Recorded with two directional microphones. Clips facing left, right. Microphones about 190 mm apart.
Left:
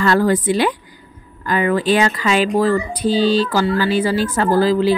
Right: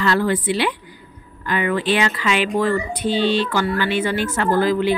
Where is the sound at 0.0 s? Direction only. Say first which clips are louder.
Left 4 dB; 45° left (ahead or behind).